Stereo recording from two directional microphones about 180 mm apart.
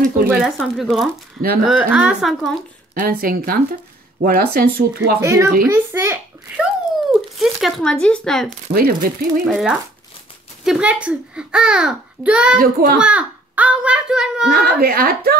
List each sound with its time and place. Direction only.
0.3 s a child's voice: centre (ahead or behind)
2.9 s speech: 55° right (ahead or behind)
5.2 s a child's voice: 15° right (ahead or behind)
6.6 s speech: centre (ahead or behind)
8.7 s speech: 55° right (ahead or behind)
9.5 s a child's voice: centre (ahead or behind)
12.5 s speech: 55° right (ahead or behind)
13.0 s a child's voice: 5° right (ahead or behind)
14.5 s speech: 60° right (ahead or behind)